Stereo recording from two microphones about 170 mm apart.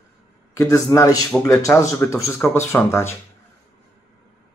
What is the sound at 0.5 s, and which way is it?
A man's voice, 20° left (ahead or behind).